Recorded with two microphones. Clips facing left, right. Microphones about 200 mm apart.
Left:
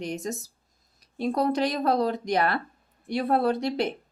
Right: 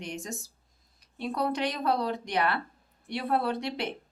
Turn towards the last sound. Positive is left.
turn(degrees=40)  # may be behind; listen again after turning